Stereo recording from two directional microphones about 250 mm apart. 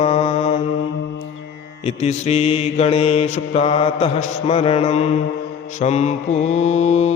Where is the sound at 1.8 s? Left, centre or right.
Left.